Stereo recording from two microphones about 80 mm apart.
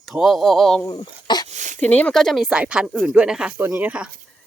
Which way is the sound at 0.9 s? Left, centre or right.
Left.